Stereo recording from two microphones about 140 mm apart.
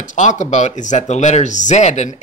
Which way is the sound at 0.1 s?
60° left (ahead or behind).